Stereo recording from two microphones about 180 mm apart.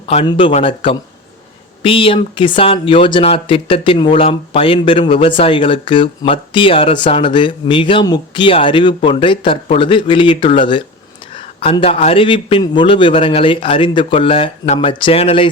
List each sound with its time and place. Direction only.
0.3 s a man's voice: 30° left (ahead or behind)